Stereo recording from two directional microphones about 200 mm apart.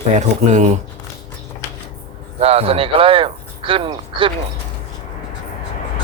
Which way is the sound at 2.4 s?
30° right (ahead or behind).